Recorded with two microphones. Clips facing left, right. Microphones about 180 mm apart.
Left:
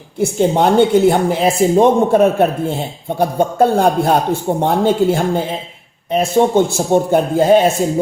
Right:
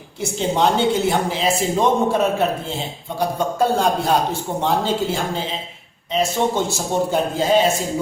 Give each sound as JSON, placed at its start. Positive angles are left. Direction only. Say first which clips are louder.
{"t": 0.2, "sound": "a woman's voice", "louder": "left 6 dB", "side_deg": 55}